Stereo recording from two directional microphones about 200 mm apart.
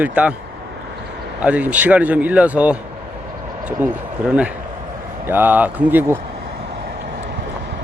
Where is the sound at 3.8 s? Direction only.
10° right (ahead or behind).